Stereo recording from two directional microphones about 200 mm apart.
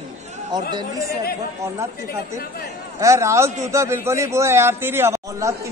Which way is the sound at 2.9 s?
15° right (ahead or behind).